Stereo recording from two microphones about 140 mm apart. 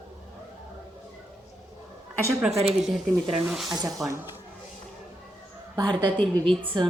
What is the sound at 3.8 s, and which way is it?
Speech, 25° right (ahead or behind).